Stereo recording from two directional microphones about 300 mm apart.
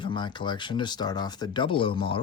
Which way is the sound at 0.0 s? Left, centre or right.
Centre.